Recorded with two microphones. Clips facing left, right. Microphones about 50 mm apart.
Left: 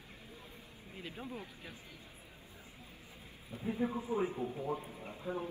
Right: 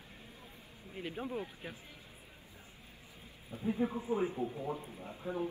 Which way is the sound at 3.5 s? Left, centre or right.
Left.